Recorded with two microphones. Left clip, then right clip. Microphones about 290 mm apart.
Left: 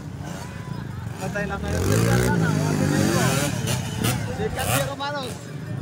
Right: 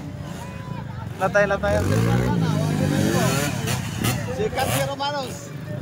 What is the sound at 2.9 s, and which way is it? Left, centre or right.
Vehicle, centre.